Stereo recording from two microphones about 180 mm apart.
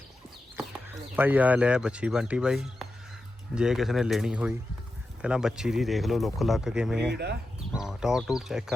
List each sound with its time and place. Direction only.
1.1 s speech: 10° right (ahead or behind)
7.1 s speech: 65° right (ahead or behind)
7.7 s speech: 5° right (ahead or behind)